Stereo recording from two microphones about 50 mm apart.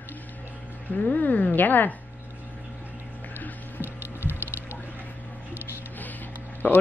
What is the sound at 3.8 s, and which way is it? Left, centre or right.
Ratchet, right.